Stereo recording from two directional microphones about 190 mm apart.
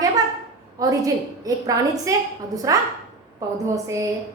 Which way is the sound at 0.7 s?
20° right (ahead or behind).